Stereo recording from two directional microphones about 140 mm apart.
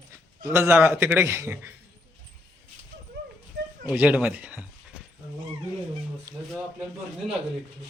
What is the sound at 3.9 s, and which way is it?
Speech, 10° right (ahead or behind).